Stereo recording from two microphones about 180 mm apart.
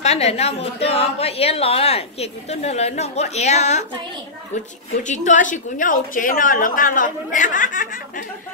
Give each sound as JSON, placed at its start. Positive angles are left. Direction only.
{"t": 0.0, "sound": "a woman's voice", "side_deg": 35}
{"t": 5.0, "sound": "a woman's voice", "side_deg": 45}